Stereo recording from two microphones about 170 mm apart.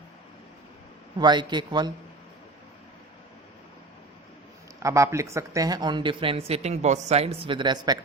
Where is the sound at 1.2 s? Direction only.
25° right (ahead or behind).